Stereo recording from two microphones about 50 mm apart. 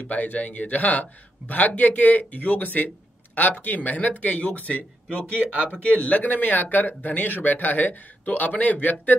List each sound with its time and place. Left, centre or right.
0.1 s speech: left
5.4 s speech: right
5.8 s speech: left